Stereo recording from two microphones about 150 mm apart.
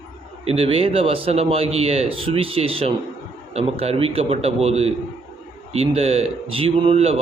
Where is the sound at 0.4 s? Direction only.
40° right (ahead or behind).